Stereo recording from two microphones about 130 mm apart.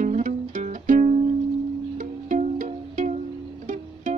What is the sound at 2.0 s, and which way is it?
Music, 75° right (ahead or behind).